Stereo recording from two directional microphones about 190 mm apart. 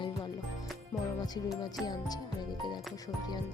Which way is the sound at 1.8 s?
20° left (ahead or behind).